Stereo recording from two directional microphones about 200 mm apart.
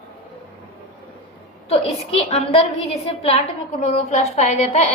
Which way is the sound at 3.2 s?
30° left (ahead or behind).